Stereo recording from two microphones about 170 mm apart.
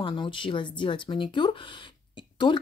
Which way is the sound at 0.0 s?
30° left (ahead or behind).